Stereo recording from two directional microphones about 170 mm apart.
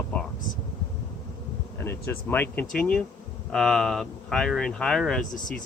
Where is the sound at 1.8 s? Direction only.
15° left (ahead or behind).